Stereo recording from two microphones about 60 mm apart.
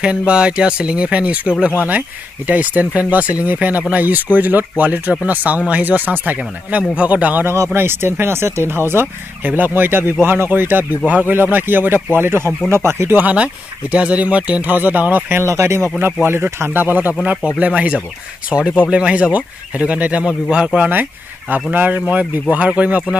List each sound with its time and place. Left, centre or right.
0.2 s speech: centre
7.7 s speech: right
11.6 s speech: right
13.2 s speech: right
15.4 s speech: right
16.2 s speech: right
17.2 s speech: centre
20.8 s speech: right